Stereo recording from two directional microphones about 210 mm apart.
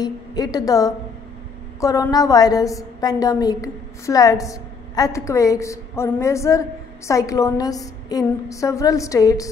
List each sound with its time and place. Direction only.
0.0 s a woman's voice: 20° left (ahead or behind)